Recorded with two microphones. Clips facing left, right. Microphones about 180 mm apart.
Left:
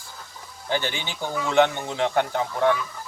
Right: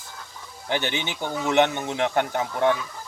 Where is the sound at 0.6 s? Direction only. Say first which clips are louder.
Right 1 dB; 20° right (ahead or behind).